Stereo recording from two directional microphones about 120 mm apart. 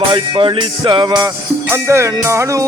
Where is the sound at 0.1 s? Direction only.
40° right (ahead or behind).